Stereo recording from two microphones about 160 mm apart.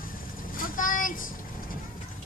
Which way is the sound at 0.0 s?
60° left (ahead or behind).